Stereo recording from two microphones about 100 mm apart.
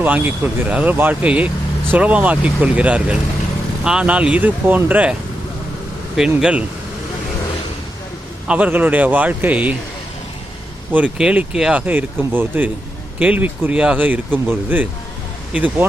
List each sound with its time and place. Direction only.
0.0 s speech: 15° right (ahead or behind)
6.1 s speech: 10° right (ahead or behind)
8.4 s speech: 15° right (ahead or behind)
10.9 s speech: 10° right (ahead or behind)
11.9 s speech: 20° right (ahead or behind)